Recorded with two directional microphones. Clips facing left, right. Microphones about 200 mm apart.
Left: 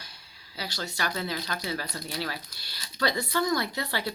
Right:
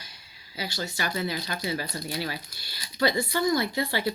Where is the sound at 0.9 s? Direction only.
5° right (ahead or behind).